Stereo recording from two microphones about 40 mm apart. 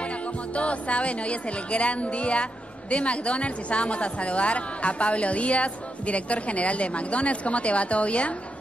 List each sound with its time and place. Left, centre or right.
0.6 s a woman's voice: left